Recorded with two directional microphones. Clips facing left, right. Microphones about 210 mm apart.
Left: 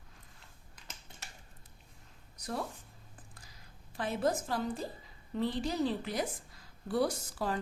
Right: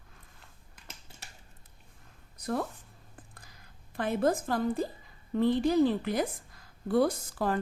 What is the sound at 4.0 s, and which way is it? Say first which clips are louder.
A woman's voice: right 4 dB; 55° right (ahead or behind).